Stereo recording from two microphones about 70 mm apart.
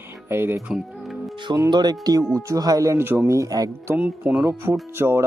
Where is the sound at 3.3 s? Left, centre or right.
Right.